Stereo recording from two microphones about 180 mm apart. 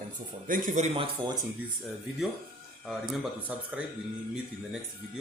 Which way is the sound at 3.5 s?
5° right (ahead or behind).